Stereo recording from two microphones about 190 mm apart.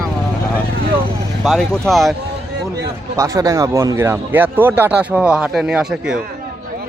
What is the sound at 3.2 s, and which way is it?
Speech, 15° right (ahead or behind).